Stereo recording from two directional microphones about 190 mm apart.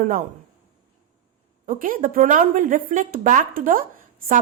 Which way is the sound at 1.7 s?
45° right (ahead or behind).